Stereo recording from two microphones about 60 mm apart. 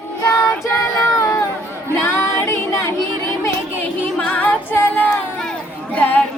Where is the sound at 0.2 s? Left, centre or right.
Left.